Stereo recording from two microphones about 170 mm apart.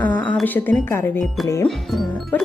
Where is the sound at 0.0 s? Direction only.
10° left (ahead or behind).